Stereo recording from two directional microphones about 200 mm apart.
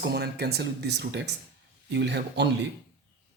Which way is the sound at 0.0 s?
55° right (ahead or behind).